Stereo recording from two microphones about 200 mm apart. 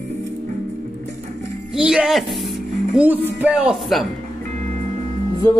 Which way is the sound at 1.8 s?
5° right (ahead or behind).